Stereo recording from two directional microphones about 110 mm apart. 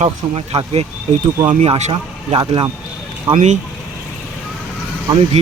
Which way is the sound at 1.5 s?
80° right.